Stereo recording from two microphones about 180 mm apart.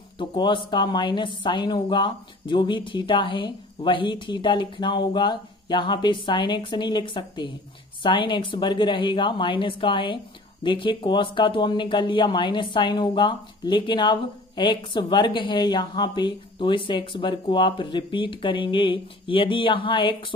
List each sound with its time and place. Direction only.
0.2 s a woman's voice: 25° left (ahead or behind)